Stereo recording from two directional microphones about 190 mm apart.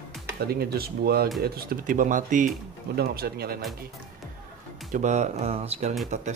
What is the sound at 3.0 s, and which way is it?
Speech, 55° right (ahead or behind).